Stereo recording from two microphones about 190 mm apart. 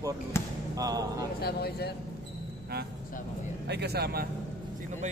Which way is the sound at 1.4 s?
55° left (ahead or behind).